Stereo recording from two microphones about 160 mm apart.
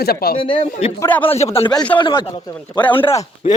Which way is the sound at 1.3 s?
40° left (ahead or behind).